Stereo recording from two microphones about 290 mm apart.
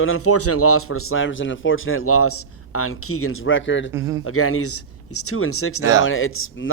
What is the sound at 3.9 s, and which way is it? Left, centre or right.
Speech, centre.